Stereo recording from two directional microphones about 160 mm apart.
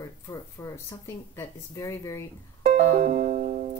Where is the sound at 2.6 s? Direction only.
45° right (ahead or behind).